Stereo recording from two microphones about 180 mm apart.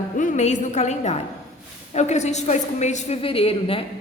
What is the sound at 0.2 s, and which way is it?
A woman's voice, 40° left (ahead or behind).